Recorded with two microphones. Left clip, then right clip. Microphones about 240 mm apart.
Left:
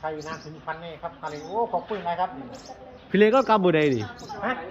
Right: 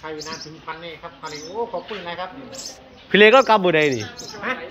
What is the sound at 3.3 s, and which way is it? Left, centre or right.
Speech, centre.